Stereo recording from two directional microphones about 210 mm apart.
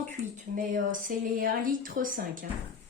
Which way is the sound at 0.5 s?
40° right (ahead or behind).